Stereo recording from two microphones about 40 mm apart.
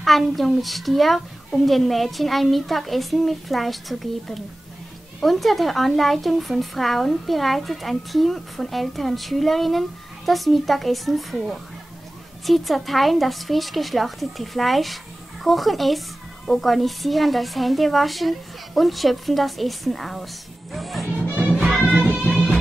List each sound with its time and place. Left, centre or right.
0.0 s a woman's voice: centre
21.9 s music: right